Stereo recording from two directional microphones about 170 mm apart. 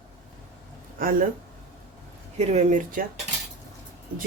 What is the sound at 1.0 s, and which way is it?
Speech, 55° right (ahead or behind).